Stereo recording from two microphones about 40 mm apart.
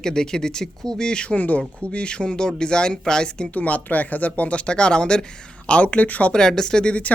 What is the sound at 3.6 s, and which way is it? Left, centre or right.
Speech, left.